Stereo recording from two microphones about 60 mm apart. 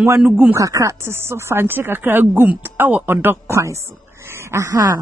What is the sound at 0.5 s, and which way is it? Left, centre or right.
Speech, right.